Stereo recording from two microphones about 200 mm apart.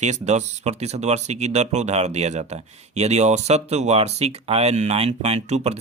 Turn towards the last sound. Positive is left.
turn(degrees=-35)  # may be behind; listen again after turning